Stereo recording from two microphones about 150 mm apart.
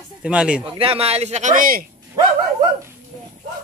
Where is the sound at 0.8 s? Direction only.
40° right (ahead or behind); by 1.9 s 70° right (ahead or behind).